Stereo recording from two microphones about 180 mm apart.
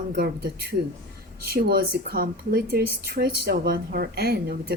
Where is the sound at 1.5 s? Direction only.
55° right (ahead or behind).